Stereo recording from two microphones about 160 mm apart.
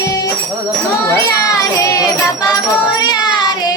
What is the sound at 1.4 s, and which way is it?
Music, 20° left (ahead or behind).